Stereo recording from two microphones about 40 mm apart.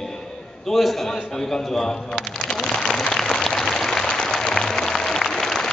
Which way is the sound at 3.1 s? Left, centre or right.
Centre.